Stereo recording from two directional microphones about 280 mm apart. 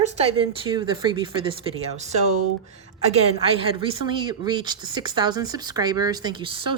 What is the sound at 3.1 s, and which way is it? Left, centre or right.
A woman's voice, centre.